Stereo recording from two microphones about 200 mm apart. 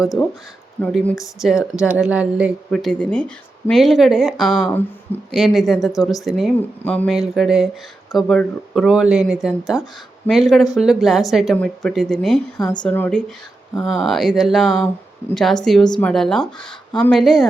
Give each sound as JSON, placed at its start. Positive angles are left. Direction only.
{"t": 0.8, "sound": "speech", "side_deg": 5}
{"t": 12.5, "sound": "a woman's voice", "side_deg": 15}
{"t": 12.8, "sound": "speech", "side_deg": 5}